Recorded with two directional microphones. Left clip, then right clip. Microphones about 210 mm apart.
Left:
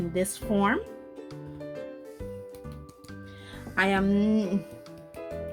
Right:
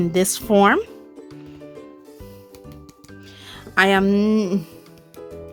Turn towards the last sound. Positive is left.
turn(degrees=-40)  # may be behind; listen again after turning